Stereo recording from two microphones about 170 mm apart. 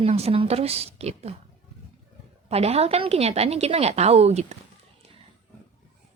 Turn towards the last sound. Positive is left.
turn(degrees=-40)  # may be behind; listen again after turning